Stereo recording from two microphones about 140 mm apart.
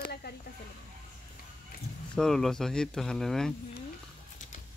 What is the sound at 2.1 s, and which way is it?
Speech, 5° left (ahead or behind).